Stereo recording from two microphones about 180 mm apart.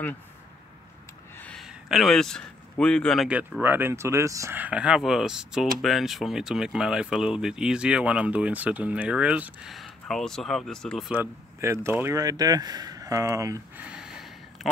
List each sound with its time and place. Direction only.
1.4 s speech: centre (ahead or behind)
11.1 s speech: 15° right (ahead or behind)
13.8 s a sound: 5° right (ahead or behind)